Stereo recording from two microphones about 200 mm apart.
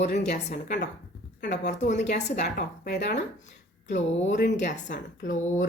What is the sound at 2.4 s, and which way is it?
Speech, 50° left (ahead or behind).